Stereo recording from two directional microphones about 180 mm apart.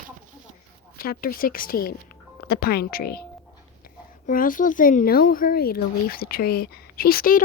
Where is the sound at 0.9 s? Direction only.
55° left (ahead or behind).